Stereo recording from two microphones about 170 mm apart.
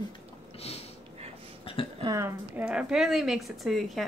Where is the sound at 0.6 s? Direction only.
35° left (ahead or behind).